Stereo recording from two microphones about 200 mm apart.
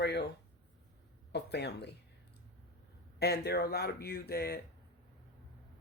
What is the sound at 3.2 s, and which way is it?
Speech, 55° left (ahead or behind).